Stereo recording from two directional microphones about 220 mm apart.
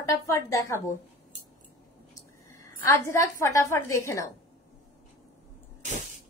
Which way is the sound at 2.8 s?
10° left (ahead or behind).